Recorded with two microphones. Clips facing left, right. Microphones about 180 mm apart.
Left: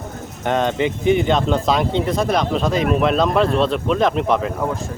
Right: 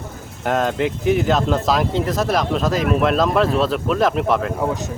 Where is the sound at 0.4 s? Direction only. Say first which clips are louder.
Left 1 dB; centre (ahead or behind).